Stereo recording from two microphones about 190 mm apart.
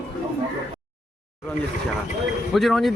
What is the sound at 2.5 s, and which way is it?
Speech, centre (ahead or behind).